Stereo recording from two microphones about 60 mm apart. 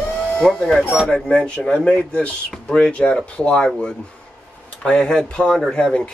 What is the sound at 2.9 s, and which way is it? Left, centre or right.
Speech, centre.